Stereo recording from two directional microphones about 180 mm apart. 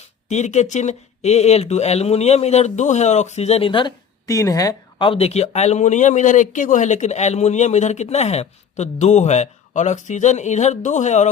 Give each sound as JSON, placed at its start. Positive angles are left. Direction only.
{"t": 0.3, "sound": "speech", "side_deg": 40}